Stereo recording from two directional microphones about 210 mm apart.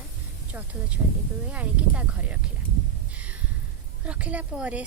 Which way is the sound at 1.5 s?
5° right (ahead or behind).